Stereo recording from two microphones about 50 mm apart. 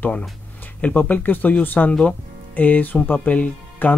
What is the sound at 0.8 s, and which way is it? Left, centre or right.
Speech, left.